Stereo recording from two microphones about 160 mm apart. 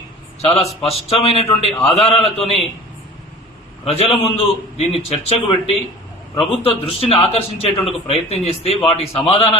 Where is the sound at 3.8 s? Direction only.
35° left (ahead or behind).